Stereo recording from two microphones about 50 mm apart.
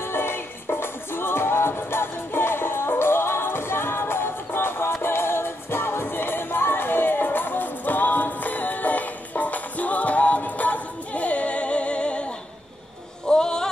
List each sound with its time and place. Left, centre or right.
0.0 s music: left
13.3 s music: centre